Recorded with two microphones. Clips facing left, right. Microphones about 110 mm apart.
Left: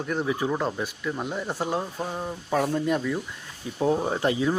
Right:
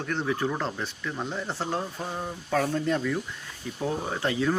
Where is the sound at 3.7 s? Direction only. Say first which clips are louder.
Left 6 dB; 25° left (ahead or behind).